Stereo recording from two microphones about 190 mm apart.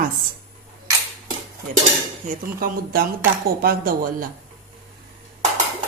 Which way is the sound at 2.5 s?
50° right (ahead or behind).